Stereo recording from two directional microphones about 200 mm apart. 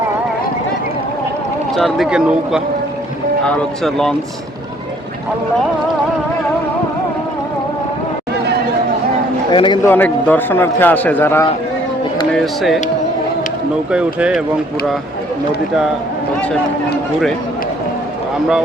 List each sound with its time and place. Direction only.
1.7 s speech: centre (ahead or behind)
9.5 s a man's voice: 25° left (ahead or behind)
9.9 s a man's voice: 10° left (ahead or behind)
12.3 s speech: centre (ahead or behind)
13.9 s speech: 5° right (ahead or behind)